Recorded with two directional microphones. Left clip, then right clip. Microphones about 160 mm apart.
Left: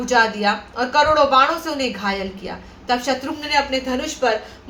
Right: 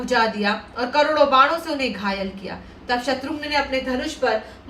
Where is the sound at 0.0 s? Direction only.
20° left (ahead or behind).